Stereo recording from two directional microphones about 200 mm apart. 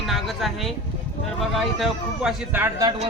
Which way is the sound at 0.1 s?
Centre (ahead or behind).